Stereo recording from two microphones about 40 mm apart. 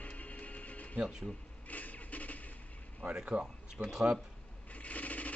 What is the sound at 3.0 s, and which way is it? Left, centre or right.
Speech, right.